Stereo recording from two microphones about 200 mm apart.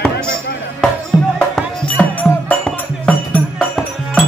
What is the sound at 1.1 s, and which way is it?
Music, 5° left (ahead or behind).